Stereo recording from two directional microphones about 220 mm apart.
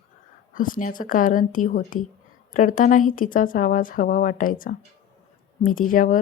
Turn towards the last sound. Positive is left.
turn(degrees=40)  # may be behind; listen again after turning